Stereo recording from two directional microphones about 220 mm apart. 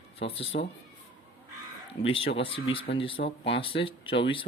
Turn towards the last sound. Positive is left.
turn(degrees=25)  # may be behind; listen again after turning